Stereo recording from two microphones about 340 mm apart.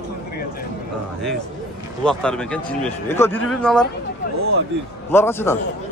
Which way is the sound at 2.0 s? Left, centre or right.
Centre.